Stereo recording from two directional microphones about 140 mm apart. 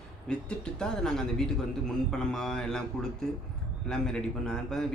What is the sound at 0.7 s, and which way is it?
Speech, 5° left (ahead or behind).